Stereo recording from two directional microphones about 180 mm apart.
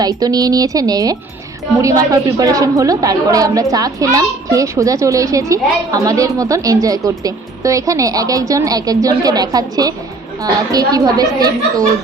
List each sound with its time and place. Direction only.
0.0 s a woman's voice: 20° right (ahead or behind)